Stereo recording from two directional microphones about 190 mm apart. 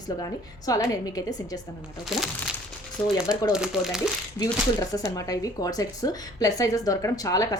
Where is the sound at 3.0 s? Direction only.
10° left (ahead or behind).